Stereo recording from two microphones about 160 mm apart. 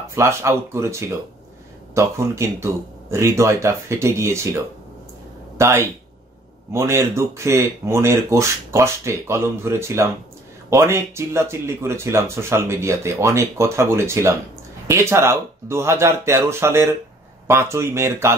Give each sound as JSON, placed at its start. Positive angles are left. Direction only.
{"t": 0.1, "sound": "speech", "side_deg": -15}
{"t": 5.6, "sound": "speech", "side_deg": -15}